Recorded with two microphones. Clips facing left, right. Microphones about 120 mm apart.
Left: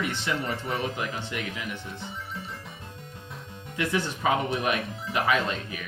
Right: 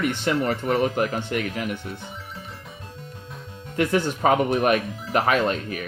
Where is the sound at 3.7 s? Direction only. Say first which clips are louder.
Right 6 dB; 55° right (ahead or behind).